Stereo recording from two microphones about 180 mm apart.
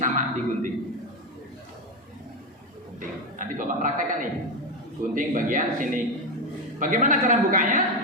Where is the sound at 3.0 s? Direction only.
45° right (ahead or behind).